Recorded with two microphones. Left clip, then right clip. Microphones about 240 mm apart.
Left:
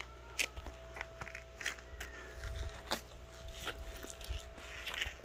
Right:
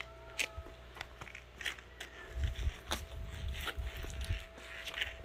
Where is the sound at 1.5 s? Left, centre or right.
Centre.